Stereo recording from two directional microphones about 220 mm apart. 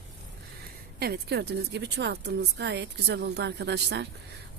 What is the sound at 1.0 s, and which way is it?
A woman's voice, 45° right (ahead or behind).